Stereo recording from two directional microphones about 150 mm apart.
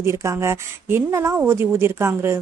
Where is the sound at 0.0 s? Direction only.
20° right (ahead or behind).